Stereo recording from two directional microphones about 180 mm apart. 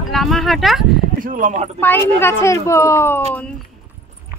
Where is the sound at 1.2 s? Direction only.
50° right (ahead or behind).